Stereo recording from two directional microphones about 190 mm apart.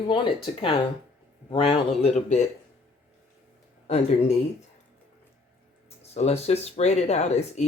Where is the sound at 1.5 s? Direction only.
25° left (ahead or behind).